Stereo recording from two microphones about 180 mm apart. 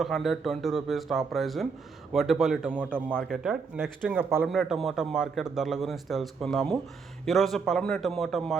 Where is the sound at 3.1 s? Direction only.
Centre (ahead or behind).